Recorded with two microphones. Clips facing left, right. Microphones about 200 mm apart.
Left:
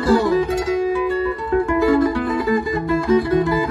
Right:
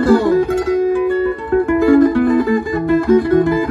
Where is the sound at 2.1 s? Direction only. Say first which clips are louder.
Right 8 dB; 55° right (ahead or behind).